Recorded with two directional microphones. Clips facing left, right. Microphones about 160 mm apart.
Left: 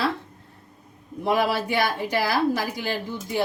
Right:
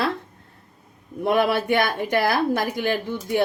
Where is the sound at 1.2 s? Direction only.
55° right (ahead or behind).